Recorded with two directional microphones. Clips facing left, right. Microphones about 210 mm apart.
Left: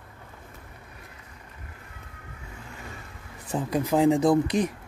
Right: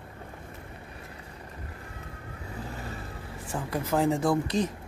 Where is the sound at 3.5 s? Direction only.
15° left (ahead or behind).